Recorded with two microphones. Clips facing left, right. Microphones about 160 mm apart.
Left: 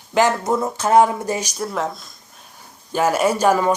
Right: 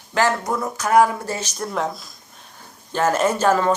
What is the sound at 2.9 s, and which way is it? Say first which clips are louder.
Speech: left 1 dB; 10° left (ahead or behind).